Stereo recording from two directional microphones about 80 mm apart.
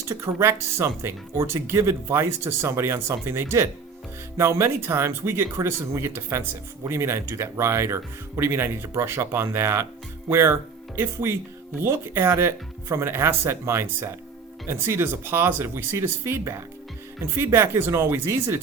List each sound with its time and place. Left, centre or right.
0.1 s speech: right